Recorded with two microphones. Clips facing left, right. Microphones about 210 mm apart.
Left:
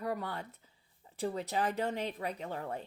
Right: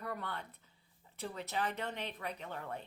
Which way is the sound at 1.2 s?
35° left (ahead or behind).